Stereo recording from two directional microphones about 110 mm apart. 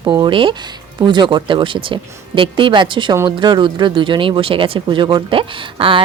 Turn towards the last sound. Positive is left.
turn(degrees=-50)  # may be behind; listen again after turning